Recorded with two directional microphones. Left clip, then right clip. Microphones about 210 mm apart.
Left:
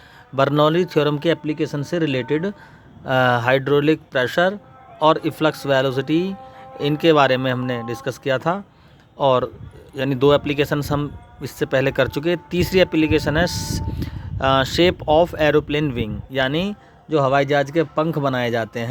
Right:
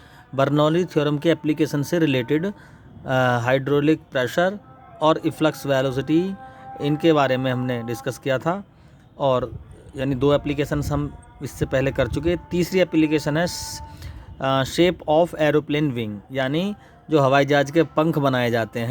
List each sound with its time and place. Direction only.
0.3 s speech: centre (ahead or behind)
17.1 s a man's voice: 10° right (ahead or behind)